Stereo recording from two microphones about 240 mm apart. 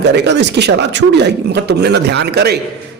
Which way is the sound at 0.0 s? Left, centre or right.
Right.